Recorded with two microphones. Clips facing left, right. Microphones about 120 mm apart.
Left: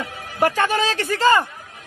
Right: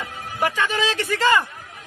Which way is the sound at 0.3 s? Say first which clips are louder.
Left 4 dB; 45° left (ahead or behind).